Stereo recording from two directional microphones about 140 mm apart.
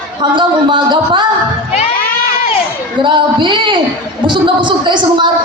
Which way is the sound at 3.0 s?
35° right (ahead or behind).